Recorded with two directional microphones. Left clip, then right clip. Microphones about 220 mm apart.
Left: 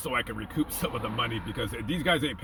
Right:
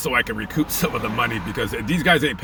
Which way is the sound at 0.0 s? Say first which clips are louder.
Right 9 dB; 15° right (ahead or behind).